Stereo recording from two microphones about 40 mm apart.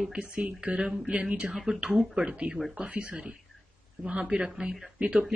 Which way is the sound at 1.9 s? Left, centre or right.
Centre.